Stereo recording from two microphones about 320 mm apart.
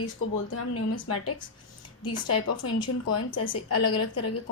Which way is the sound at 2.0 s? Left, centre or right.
Left.